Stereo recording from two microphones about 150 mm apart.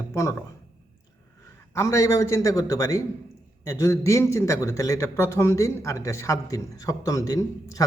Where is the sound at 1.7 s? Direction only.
20° left (ahead or behind).